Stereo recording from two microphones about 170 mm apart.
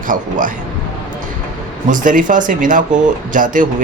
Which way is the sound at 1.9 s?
50° right (ahead or behind).